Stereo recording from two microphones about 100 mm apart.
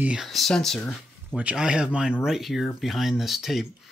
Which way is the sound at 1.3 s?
10° right (ahead or behind).